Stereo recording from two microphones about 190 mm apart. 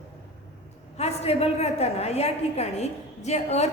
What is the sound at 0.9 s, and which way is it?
A woman's voice, 35° left (ahead or behind).